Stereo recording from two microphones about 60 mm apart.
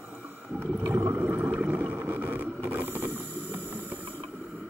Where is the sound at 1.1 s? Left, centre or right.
Right.